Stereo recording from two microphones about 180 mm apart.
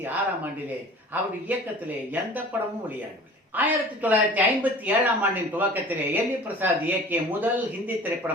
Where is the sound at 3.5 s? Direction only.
10° right (ahead or behind).